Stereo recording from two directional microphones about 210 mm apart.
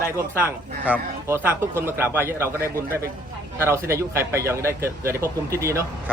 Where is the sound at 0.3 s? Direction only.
10° right (ahead or behind).